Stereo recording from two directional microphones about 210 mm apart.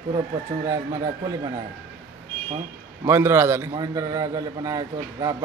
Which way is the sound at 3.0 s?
10° right (ahead or behind).